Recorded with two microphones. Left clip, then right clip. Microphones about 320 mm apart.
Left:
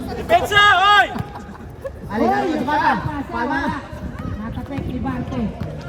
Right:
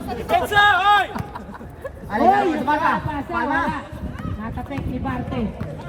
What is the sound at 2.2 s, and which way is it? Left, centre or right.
Speech, right.